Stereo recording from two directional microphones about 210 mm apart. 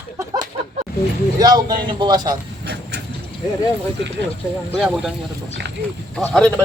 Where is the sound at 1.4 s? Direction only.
20° right (ahead or behind).